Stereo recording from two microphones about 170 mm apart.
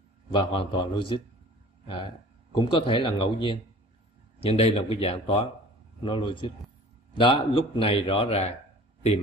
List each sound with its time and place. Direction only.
0.3 s a man's voice: 30° left (ahead or behind)
2.5 s a man's voice: 30° left (ahead or behind)